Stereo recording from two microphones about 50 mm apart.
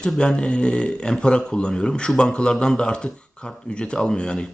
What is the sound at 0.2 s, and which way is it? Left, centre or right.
A man's voice, centre.